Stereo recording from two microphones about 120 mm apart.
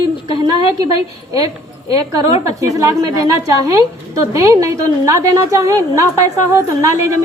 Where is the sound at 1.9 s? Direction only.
30° right (ahead or behind).